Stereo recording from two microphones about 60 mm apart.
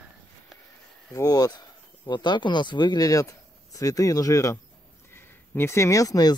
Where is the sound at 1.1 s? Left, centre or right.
Left.